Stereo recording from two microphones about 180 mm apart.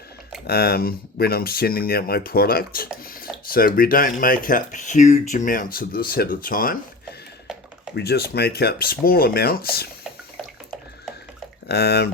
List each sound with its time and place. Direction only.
0.4 s speech: 60° left (ahead or behind)
7.9 s speech: 60° left (ahead or behind)
11.7 s speech: 60° left (ahead or behind)